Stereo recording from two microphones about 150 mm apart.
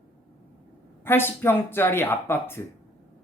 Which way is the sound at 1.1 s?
15° left (ahead or behind).